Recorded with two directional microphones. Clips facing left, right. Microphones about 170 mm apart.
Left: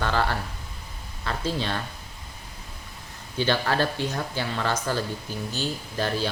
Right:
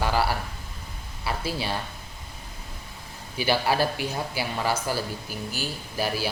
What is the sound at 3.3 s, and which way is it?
Speech, 10° right (ahead or behind).